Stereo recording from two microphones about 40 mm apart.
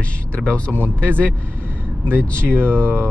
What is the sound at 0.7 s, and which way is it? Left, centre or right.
Speech, right.